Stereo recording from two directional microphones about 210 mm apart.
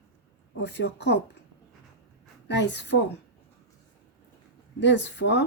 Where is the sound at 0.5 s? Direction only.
55° left (ahead or behind).